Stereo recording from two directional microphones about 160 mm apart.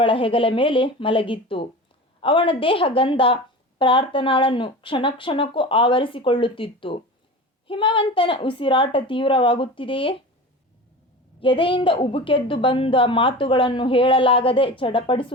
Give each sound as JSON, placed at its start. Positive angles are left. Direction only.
{"t": 0.0, "sound": "a woman's voice", "side_deg": 35}
{"t": 11.3, "sound": "a woman's voice", "side_deg": 35}